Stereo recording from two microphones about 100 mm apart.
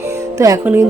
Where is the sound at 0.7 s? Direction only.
15° right (ahead or behind).